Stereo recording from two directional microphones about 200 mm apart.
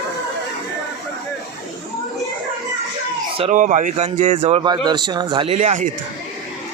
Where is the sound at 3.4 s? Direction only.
40° right (ahead or behind).